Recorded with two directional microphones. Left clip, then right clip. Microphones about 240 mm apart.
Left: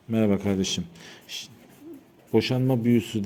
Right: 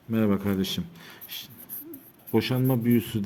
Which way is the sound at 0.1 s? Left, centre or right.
Centre.